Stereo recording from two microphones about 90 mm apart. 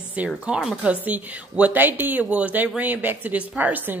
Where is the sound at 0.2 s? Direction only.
15° right (ahead or behind).